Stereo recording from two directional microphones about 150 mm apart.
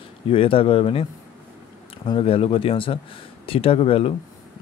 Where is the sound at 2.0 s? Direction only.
35° left (ahead or behind).